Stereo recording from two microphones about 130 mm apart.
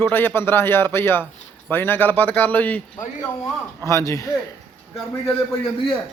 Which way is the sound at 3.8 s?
25° left (ahead or behind).